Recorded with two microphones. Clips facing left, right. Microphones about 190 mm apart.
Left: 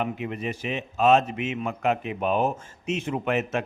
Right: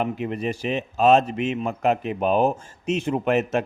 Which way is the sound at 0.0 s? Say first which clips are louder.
Right 4 dB; 35° right (ahead or behind).